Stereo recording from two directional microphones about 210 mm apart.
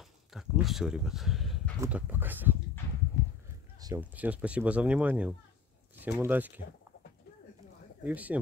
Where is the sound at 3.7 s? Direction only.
15° right (ahead or behind).